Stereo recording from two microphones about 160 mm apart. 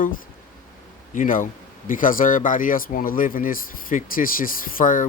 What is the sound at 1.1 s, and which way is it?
Speech, 55° left (ahead or behind).